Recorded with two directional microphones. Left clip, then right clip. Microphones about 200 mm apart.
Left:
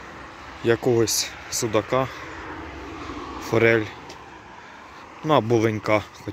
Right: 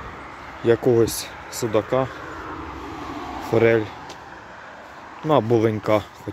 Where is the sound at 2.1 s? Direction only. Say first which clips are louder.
Right 2 dB; 55° right (ahead or behind).